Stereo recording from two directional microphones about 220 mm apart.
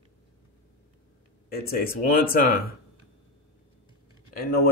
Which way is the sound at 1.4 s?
45° left (ahead or behind).